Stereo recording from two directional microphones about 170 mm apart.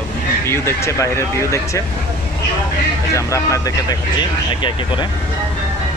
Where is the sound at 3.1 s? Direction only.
20° left (ahead or behind).